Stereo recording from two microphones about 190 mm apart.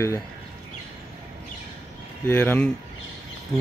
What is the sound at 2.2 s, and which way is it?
Speech, 10° left (ahead or behind).